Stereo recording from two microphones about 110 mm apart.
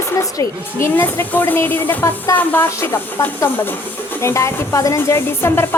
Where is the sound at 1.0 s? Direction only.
15° left (ahead or behind).